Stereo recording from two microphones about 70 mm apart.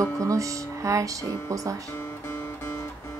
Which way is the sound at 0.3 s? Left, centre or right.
Right.